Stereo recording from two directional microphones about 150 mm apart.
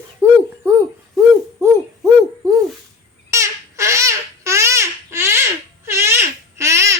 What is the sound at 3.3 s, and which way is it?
Babbling, 20° right (ahead or behind).